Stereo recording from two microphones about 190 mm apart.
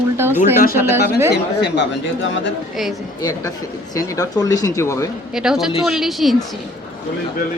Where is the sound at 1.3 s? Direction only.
65° left (ahead or behind).